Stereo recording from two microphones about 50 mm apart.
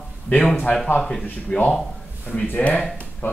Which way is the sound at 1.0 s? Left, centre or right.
Centre.